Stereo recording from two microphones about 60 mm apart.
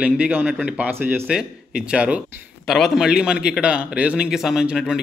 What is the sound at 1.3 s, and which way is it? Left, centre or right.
Speech, centre.